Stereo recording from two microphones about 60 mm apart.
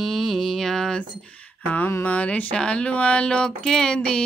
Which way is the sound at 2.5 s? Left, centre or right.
Centre.